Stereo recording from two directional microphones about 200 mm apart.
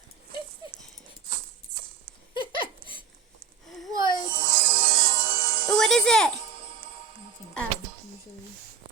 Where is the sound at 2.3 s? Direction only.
25° left (ahead or behind).